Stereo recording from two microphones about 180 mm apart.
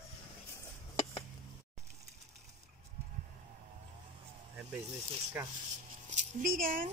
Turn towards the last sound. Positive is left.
turn(degrees=-50)  # may be behind; listen again after turning